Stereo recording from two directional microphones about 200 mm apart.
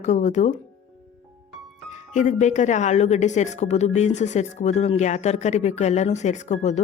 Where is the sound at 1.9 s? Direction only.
35° left (ahead or behind).